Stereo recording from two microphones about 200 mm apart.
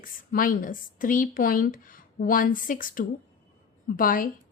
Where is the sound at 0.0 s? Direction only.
45° left (ahead or behind).